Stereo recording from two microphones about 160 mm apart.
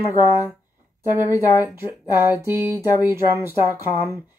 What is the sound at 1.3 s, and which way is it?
Speech, 20° left (ahead or behind).